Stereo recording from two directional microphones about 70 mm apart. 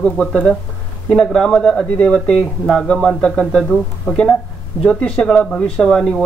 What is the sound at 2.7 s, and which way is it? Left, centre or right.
Speech, centre.